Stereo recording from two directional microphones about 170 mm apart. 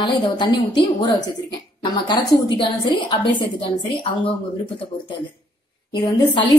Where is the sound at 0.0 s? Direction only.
25° left (ahead or behind).